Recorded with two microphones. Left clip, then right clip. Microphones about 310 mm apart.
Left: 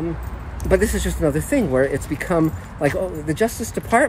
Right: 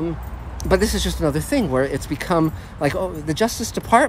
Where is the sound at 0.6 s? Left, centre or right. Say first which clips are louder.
Even; centre.